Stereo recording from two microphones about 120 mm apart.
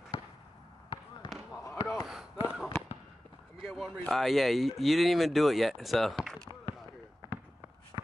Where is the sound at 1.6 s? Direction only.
25° left (ahead or behind).